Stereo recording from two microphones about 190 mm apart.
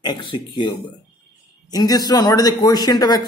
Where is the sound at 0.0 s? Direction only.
25° left (ahead or behind).